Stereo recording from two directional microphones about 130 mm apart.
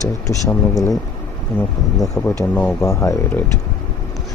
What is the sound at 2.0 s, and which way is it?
Speech, 10° left (ahead or behind).